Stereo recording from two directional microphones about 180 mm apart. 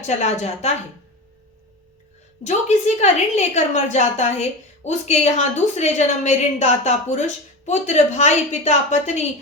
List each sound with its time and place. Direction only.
0.0 s a woman's voice: 40° left (ahead or behind)
2.4 s a woman's voice: 40° left (ahead or behind)